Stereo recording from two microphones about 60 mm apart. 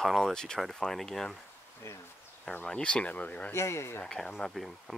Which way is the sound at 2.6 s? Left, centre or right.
Centre.